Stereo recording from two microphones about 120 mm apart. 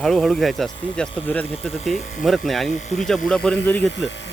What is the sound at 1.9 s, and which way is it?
Speech, 85° left.